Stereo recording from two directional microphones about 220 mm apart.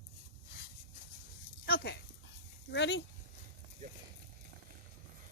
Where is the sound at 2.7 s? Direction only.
55° left (ahead or behind).